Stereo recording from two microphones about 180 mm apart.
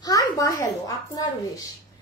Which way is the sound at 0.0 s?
20° left (ahead or behind).